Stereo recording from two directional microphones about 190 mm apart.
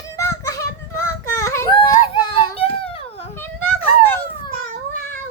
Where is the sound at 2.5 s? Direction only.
30° left (ahead or behind).